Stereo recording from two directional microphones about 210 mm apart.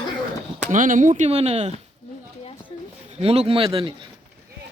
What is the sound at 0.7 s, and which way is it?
Speech, 40° right (ahead or behind).